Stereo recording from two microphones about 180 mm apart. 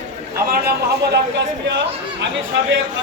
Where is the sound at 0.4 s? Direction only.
55° right (ahead or behind).